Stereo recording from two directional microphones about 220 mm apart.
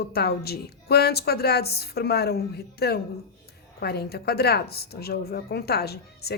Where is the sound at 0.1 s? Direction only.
45° left (ahead or behind).